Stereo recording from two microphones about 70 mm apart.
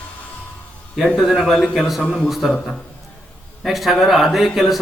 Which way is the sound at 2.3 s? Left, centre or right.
Centre.